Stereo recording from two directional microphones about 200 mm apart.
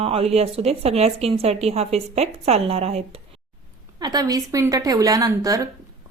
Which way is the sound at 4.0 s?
20° right (ahead or behind).